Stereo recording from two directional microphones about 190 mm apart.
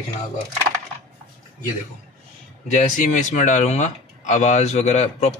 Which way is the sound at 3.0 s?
40° left (ahead or behind).